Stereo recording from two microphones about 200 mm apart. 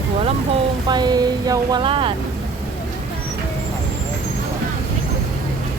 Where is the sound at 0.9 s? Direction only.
20° right (ahead or behind).